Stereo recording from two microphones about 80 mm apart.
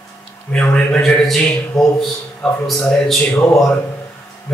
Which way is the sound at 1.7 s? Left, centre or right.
Centre.